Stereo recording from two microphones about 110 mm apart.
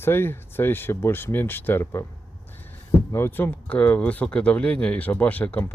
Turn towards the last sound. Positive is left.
turn(degrees=15)  # may be behind; listen again after turning